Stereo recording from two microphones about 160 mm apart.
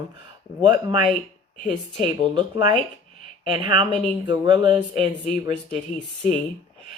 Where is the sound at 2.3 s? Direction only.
30° right (ahead or behind).